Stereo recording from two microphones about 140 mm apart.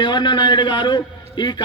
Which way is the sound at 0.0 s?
35° left (ahead or behind).